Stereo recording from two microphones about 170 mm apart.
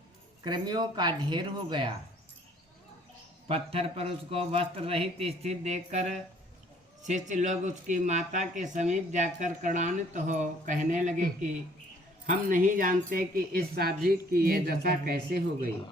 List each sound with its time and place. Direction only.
0.4 s speech: 25° right (ahead or behind)
3.5 s a man's voice: 35° right (ahead or behind); by 15.7 s 65° right (ahead or behind)